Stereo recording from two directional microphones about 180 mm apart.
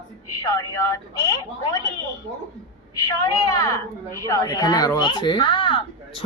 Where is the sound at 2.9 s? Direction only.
20° left (ahead or behind).